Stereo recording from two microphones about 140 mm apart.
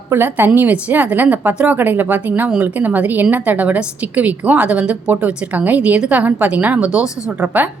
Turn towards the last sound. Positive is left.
turn(degrees=-10)  # may be behind; listen again after turning